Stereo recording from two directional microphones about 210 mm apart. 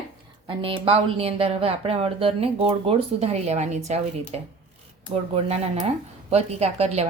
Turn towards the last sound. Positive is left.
turn(degrees=-30)  # may be behind; listen again after turning